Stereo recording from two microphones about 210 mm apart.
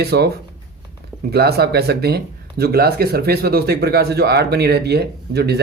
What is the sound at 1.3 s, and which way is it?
Speech, 50° right (ahead or behind).